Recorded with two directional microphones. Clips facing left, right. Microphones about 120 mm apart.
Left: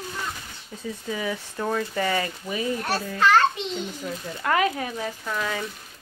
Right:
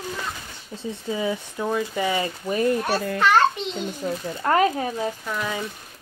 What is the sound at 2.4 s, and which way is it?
Speech, 45° right (ahead or behind).